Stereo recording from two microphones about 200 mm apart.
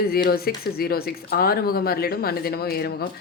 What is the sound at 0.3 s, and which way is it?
Speech, 50° left (ahead or behind).